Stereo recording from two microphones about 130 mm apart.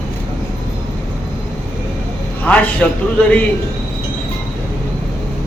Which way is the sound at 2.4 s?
10° left (ahead or behind).